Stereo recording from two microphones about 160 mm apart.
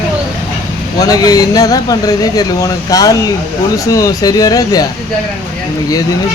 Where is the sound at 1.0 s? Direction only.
20° left (ahead or behind).